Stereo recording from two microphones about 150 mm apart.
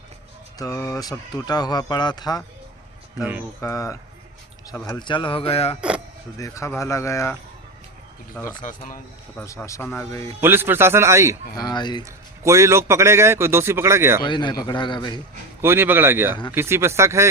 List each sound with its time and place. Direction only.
0.6 s speech: 20° left (ahead or behind)
3.2 s a man's voice: 10° right (ahead or behind)
3.6 s speech: 20° left (ahead or behind)
4.9 s speech: 30° left (ahead or behind)
6.3 s speech: 20° left (ahead or behind)
8.4 s speech: 10° left (ahead or behind)
9.6 s speech: 15° left (ahead or behind)
10.4 s a man's voice: 15° right (ahead or behind)
11.5 s speech: 30° left (ahead or behind)
12.0 s a man's voice: 20° right (ahead or behind)
14.3 s speech: 30° left (ahead or behind)
15.6 s a man's voice: 15° right (ahead or behind)